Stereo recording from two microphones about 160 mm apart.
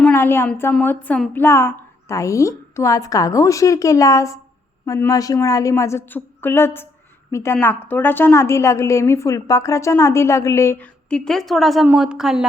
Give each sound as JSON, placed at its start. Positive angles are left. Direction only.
{"t": 0.0, "sound": "a woman's voice", "side_deg": 15}
{"t": 11.1, "sound": "a woman's voice", "side_deg": 0}